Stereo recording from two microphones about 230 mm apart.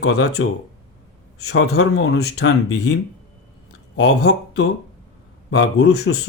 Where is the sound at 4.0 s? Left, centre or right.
Left.